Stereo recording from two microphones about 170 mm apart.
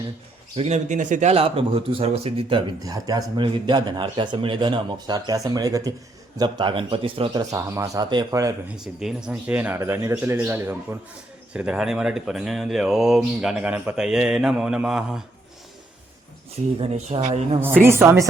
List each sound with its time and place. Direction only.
0.5 s speech: 40° right (ahead or behind); by 8.5 s 20° right (ahead or behind)
8.7 s speech: 5° right (ahead or behind)
16.8 s a man's voice: 40° right (ahead or behind)
17.8 s speech: 15° right (ahead or behind)